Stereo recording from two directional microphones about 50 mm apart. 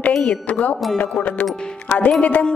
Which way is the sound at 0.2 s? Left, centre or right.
Left.